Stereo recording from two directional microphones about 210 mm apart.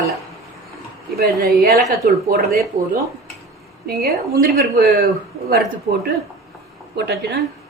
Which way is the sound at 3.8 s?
45° right (ahead or behind).